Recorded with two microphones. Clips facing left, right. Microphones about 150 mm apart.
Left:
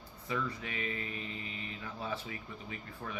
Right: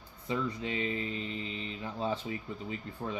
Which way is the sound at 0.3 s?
25° right (ahead or behind).